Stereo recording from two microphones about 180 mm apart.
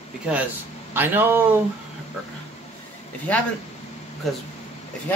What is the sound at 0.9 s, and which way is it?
Speech, 10° right (ahead or behind).